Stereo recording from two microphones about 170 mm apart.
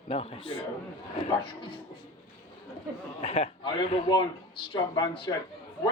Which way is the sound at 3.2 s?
35° left (ahead or behind).